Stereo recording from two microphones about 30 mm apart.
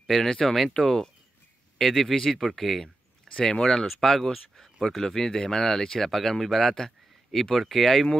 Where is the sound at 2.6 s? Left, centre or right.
Centre.